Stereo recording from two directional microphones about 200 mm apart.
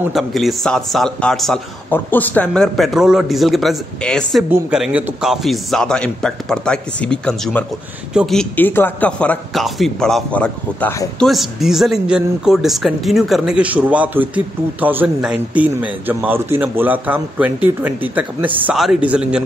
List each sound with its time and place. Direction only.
0.1 s a man's voice: centre (ahead or behind)
11.2 s a man's voice: centre (ahead or behind)